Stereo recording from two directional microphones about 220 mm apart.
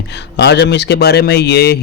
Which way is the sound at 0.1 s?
50° left (ahead or behind).